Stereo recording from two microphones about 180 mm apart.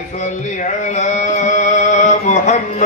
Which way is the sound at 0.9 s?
45° left (ahead or behind).